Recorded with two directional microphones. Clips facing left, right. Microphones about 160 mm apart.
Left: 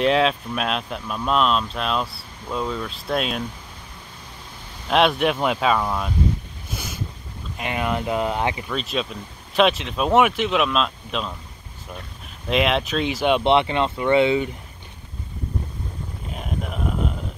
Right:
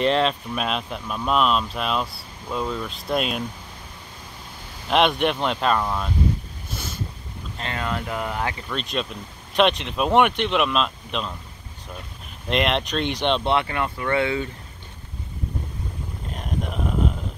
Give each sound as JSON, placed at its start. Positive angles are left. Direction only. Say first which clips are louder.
{"t": 0.0, "sound": "speech", "louder": "left 2 dB", "side_deg": 0}
{"t": 4.8, "sound": "speech", "louder": "left 1 dB", "side_deg": 0}
{"t": 6.7, "sound": "a sound", "louder": "left 1 dB", "side_deg": 10}
{"t": 7.5, "sound": "speech", "louder": "left 4 dB", "side_deg": 15}
{"t": 8.6, "sound": "speech", "louder": "left 2 dB", "side_deg": 0}
{"t": 12.4, "sound": "speech", "louder": "left 2 dB", "side_deg": 0}
{"t": 13.4, "sound": "speech", "louder": "left 4 dB", "side_deg": 20}
{"t": 16.3, "sound": "a sound", "louder": "right 1 dB", "side_deg": 0}